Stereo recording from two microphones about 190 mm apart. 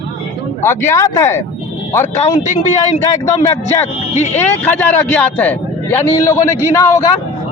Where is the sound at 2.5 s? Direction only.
40° left (ahead or behind).